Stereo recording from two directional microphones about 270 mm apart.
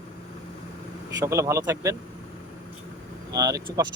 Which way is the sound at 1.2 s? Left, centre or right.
Centre.